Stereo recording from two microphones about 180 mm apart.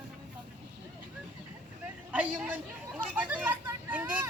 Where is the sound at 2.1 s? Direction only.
5° right (ahead or behind).